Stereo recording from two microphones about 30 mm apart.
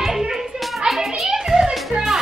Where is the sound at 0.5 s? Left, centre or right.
Centre.